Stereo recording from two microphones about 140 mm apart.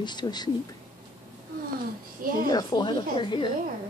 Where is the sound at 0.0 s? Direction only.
30° left (ahead or behind).